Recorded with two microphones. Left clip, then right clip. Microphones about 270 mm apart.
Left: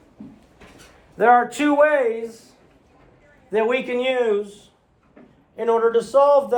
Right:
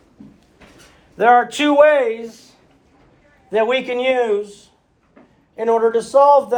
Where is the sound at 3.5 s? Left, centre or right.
Centre.